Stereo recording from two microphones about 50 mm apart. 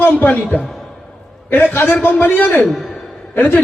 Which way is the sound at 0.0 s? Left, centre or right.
Left.